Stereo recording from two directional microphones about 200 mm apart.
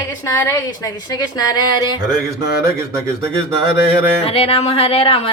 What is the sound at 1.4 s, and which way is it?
Speech, 20° left (ahead or behind).